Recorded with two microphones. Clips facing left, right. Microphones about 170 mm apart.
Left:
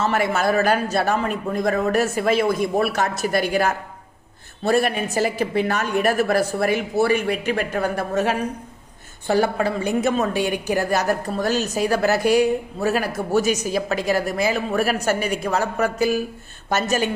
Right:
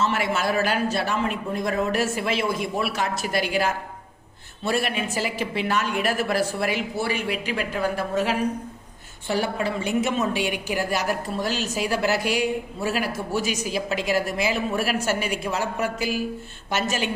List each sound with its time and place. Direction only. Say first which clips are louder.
0.1 s a woman's voice: left 4 dB; 45° left (ahead or behind)